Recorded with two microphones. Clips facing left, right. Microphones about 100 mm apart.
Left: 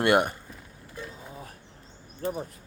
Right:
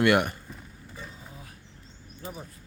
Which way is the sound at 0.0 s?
25° left (ahead or behind).